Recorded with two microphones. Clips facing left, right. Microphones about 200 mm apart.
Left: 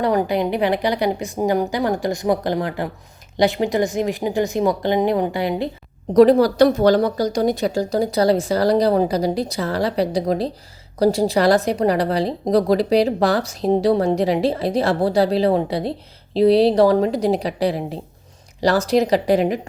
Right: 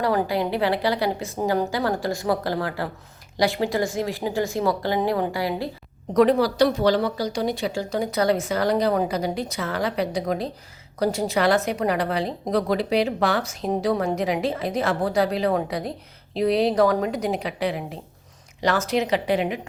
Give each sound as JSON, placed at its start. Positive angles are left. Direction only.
{"t": 0.0, "sound": "a woman's voice", "side_deg": 20}
{"t": 6.1, "sound": "a woman's voice", "side_deg": 40}